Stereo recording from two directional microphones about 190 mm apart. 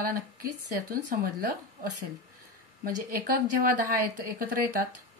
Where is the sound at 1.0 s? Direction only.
50° right (ahead or behind).